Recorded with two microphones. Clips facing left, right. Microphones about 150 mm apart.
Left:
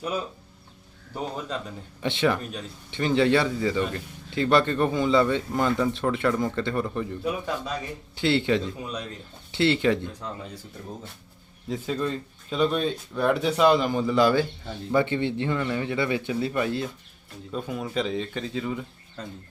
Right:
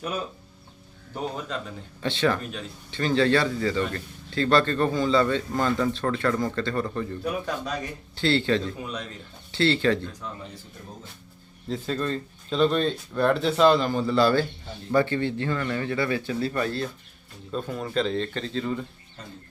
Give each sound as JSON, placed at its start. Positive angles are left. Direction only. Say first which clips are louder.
{"t": 2.0, "sound": "a man's voice", "louder": "even", "side_deg": 15}
{"t": 8.1, "sound": "a man's voice", "louder": "even", "side_deg": 15}
{"t": 11.7, "sound": "a man's voice", "louder": "even", "side_deg": 10}